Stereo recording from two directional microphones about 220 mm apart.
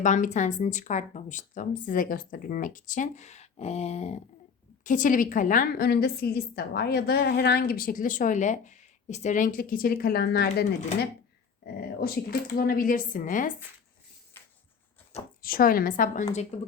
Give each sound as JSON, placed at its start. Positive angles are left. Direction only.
{"t": 0.0, "sound": "a woman's voice", "side_deg": 35}
{"t": 14.3, "sound": "a sound", "side_deg": 10}
{"t": 15.4, "sound": "a woman's voice", "side_deg": 40}